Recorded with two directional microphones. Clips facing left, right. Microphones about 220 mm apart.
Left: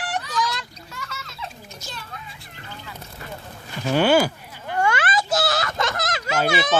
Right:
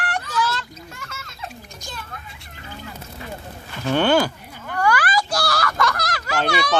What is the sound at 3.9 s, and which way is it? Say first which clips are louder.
Speech: even; 10° left (ahead or behind).